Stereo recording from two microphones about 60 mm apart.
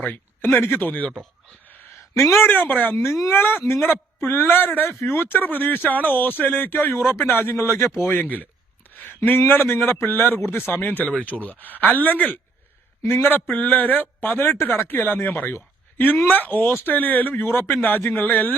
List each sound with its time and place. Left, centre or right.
0.0 s speech: left
2.4 s speech: left
8.0 s speech: left
9.0 s a sound: left
9.5 s speech: left
13.1 s speech: left